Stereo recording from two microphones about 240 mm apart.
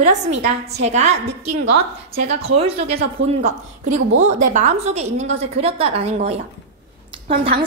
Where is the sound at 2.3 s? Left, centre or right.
Right.